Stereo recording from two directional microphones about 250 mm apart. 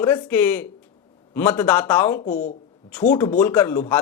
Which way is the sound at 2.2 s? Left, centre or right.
Left.